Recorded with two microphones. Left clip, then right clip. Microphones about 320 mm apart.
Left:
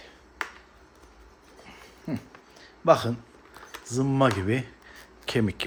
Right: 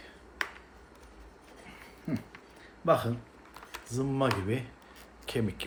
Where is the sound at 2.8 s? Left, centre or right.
Left.